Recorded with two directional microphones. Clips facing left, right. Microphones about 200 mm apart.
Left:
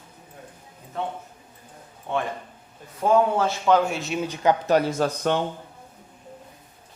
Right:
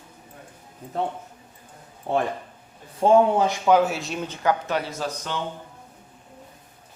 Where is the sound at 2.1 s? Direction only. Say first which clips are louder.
Right 3 dB; 35° right (ahead or behind).